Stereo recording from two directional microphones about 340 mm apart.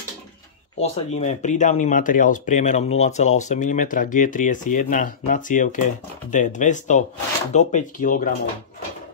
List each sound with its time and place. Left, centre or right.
0.7 s speech: centre